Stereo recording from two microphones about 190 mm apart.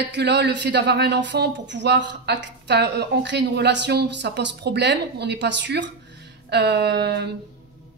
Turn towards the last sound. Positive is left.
turn(degrees=-60)  # may be behind; listen again after turning